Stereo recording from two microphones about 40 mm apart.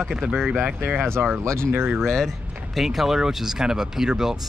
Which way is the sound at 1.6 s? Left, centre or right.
Right.